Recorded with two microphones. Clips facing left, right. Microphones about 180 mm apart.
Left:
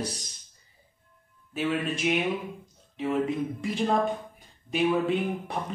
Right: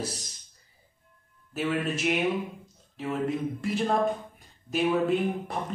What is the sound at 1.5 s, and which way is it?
Speech, 5° right (ahead or behind).